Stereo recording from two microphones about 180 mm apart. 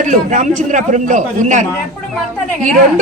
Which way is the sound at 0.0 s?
40° right (ahead or behind).